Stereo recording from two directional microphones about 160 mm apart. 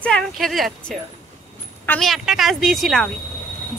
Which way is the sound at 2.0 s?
Centre (ahead or behind).